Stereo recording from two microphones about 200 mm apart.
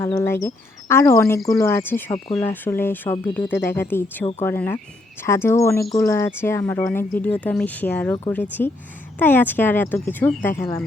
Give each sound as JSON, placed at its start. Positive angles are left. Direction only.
{"t": 0.0, "sound": "speech", "side_deg": 15}
{"t": 2.1, "sound": "speech", "side_deg": 25}
{"t": 2.4, "sound": "speech", "side_deg": 10}